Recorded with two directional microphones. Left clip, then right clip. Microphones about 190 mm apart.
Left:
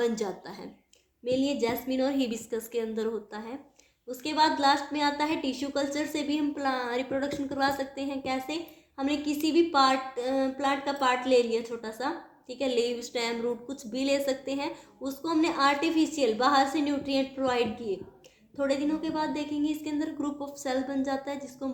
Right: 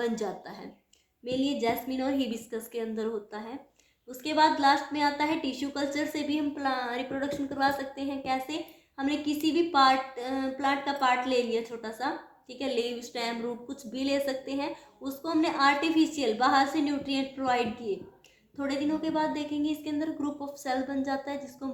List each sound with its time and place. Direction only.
0.0 s a woman's voice: 30° left (ahead or behind)